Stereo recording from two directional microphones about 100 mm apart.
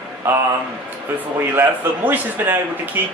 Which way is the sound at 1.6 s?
20° right (ahead or behind).